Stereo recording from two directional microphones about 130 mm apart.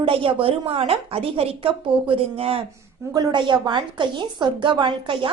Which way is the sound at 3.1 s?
35° right (ahead or behind).